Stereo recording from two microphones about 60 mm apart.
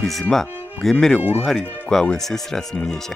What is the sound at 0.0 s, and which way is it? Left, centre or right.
Speech, centre.